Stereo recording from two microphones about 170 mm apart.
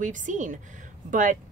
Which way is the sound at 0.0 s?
50° right (ahead or behind).